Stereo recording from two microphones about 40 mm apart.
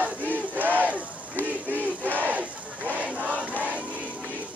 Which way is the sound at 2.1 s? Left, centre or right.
Right.